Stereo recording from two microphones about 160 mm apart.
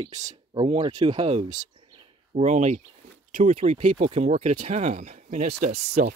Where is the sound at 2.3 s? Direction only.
45° right (ahead or behind).